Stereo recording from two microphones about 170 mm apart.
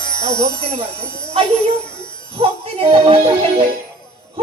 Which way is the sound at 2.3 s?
35° right (ahead or behind).